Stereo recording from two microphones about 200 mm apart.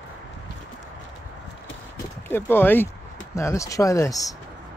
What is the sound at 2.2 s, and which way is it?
Speech, 10° left (ahead or behind).